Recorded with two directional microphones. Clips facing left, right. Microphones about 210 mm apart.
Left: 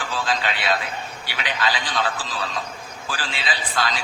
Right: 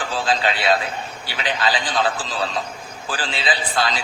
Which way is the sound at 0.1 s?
30° right (ahead or behind).